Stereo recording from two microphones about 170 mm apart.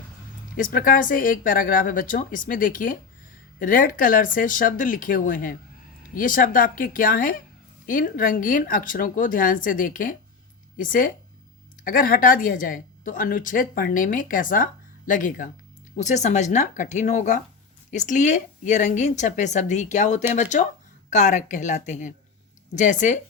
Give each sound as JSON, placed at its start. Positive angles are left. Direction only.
{"t": 0.5, "sound": "a woman's voice", "side_deg": 55}